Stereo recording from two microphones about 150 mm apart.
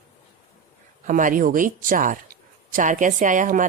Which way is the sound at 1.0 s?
65° right (ahead or behind).